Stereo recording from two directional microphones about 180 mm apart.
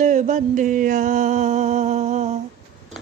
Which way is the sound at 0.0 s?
45° right (ahead or behind).